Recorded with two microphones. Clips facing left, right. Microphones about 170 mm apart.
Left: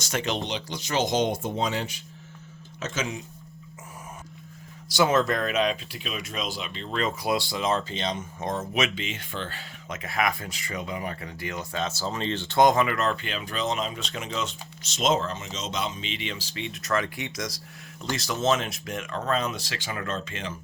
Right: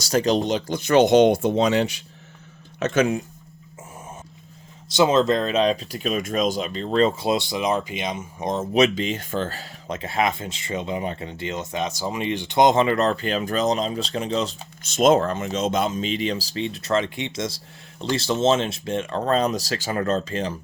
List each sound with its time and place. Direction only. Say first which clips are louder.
0.0 s speech: right 9 dB; 35° right (ahead or behind); by 2.0 s 75° right (ahead or behind)
2.8 s speech: right 11 dB; 60° right (ahead or behind)
4.9 s speech: right 5 dB; 20° right (ahead or behind)
8.7 s speech: right 9 dB; 35° right (ahead or behind)
14.8 s speech: right 8 dB; 50° right (ahead or behind)